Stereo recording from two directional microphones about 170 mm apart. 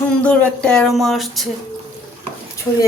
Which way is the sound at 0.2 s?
5° left (ahead or behind).